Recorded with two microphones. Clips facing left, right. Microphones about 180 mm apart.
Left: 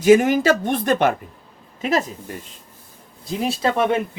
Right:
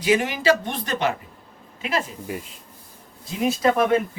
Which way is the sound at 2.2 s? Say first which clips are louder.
Right 3 dB; 5° right (ahead or behind).